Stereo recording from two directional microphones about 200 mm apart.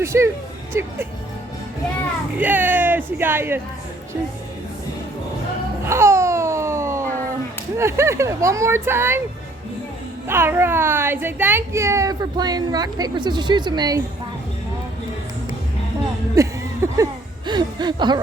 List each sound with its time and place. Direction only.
0.0 s speech: 15° right (ahead or behind)
2.4 s speech: 10° right (ahead or behind)
5.9 s babbling: 15° right (ahead or behind)
7.8 s speech: 15° right (ahead or behind)
10.2 s speech: 10° right (ahead or behind)
16.3 s a sound: 15° right (ahead or behind)